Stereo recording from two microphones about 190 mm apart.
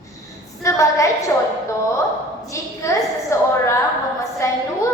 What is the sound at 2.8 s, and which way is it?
Speech, 15° left (ahead or behind).